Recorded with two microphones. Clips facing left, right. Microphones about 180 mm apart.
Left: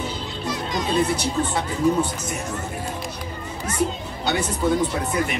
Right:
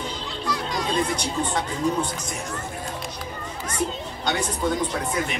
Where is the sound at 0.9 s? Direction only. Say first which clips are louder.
Left 5 dB; 5° left (ahead or behind).